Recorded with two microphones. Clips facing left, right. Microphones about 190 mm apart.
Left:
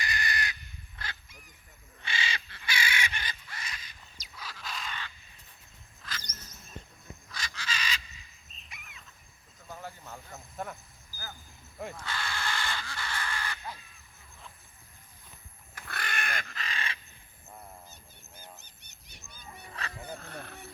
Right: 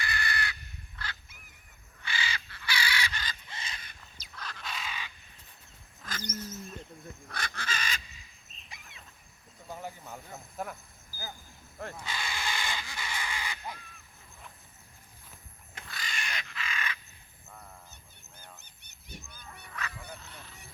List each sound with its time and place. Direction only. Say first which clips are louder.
0.0 s crow: even; 15° left (ahead or behind)
2.0 s crow: left 1 dB; 25° left (ahead or behind)
3.5 s crow: even; 25° right (ahead or behind)
4.2 s bird: right 1 dB; 5° left (ahead or behind)
6.0 s wild animals: right 2 dB; 45° right (ahead or behind)
7.3 s crow: right 2 dB; 55° right (ahead or behind)
8.7 s a sound: right 1 dB; 30° right (ahead or behind)
9.6 s a sound: right 2 dB; 15° right (ahead or behind)
11.9 s crow: right 1 dB; 15° right (ahead or behind)
15.9 s crow: left 4 dB; 60° left (ahead or behind); by 17.0 s 30° left (ahead or behind)
18.6 s goose: left 1 dB; 55° right (ahead or behind)
19.6 s wild animals: right 1 dB; 30° left (ahead or behind)
20.1 s goose: left 7 dB; 55° left (ahead or behind)